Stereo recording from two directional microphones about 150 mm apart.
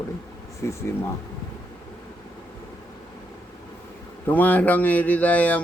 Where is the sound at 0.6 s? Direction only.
15° left (ahead or behind).